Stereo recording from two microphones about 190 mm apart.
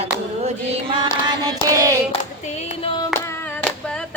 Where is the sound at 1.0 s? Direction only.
20° right (ahead or behind).